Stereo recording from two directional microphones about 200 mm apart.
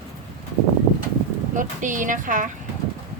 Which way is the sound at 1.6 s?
40° right (ahead or behind).